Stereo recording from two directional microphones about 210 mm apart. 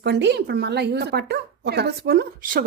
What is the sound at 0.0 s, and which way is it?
A woman's voice, 55° right (ahead or behind).